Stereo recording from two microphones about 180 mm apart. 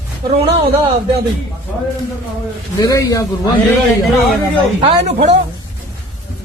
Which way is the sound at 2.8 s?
20° left (ahead or behind).